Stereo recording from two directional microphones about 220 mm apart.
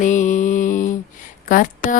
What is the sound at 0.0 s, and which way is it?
Mantra, 35° left (ahead or behind).